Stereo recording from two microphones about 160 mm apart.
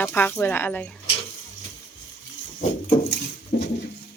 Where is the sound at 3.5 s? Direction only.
65° left (ahead or behind).